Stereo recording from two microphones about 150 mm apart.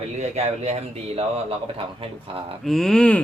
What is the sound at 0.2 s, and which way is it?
Speech, 45° right (ahead or behind).